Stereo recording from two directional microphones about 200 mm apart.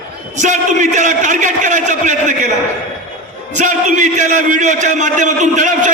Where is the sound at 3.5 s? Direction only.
40° right (ahead or behind).